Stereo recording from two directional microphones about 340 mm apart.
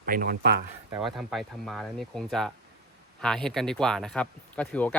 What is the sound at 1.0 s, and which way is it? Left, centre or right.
Speech, centre.